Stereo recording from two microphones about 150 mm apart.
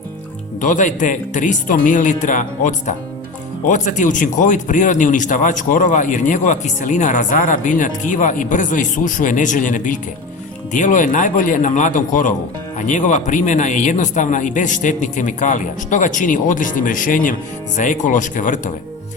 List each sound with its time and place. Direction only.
0.6 s a man's voice: 60° left (ahead or behind)